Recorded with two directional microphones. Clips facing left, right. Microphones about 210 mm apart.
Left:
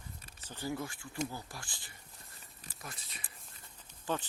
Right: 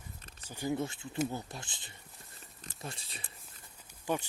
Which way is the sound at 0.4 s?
15° right (ahead or behind).